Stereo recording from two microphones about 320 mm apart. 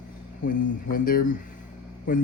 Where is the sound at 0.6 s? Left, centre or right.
Left.